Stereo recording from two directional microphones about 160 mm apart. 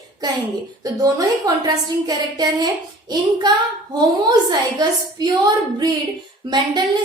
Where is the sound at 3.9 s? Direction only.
25° right (ahead or behind).